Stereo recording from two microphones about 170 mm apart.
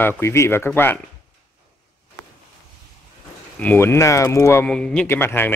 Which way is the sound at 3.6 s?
10° left (ahead or behind).